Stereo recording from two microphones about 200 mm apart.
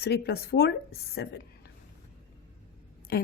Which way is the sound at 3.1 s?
50° left (ahead or behind).